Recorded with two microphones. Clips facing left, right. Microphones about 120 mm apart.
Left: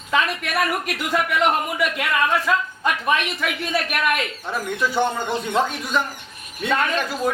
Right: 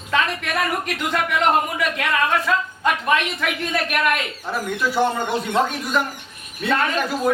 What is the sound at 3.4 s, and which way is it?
A man's voice, centre (ahead or behind).